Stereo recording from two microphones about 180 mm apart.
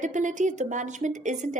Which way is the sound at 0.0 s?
45° right (ahead or behind).